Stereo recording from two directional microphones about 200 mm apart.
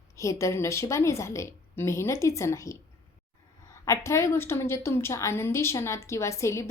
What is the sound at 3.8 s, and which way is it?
A woman's voice, 15° left (ahead or behind).